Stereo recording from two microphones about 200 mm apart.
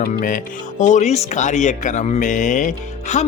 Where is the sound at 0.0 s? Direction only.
40° left (ahead or behind).